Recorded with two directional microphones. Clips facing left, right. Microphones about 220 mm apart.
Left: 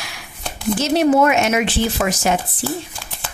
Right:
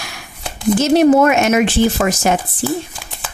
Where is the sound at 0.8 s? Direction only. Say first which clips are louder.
Right 4 dB; 50° right (ahead or behind).